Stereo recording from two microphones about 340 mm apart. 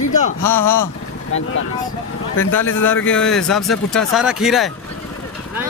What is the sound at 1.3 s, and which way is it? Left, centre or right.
Speech, left.